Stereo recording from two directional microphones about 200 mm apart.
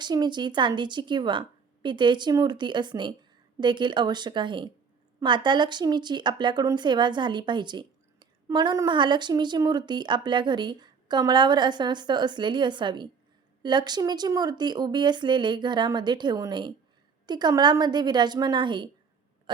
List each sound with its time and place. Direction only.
0.0 s speech: 20° right (ahead or behind)